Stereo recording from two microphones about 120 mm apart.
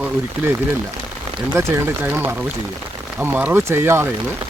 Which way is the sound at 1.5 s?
20° right (ahead or behind).